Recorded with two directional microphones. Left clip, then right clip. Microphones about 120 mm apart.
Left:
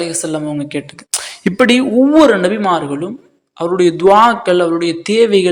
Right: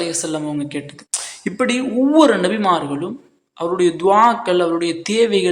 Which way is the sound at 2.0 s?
25° left (ahead or behind).